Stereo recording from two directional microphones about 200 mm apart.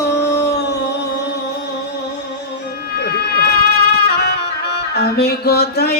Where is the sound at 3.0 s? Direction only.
50° left (ahead or behind).